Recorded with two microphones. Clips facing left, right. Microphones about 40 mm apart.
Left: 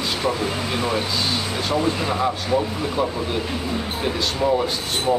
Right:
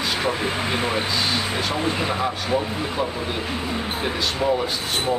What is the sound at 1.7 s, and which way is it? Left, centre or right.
Speech, right.